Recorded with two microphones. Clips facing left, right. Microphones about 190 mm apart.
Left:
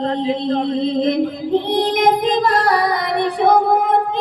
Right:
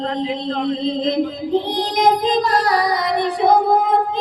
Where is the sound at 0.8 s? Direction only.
60° left (ahead or behind).